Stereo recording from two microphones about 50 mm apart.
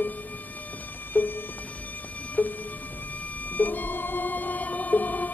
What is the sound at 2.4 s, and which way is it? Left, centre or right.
Music, left.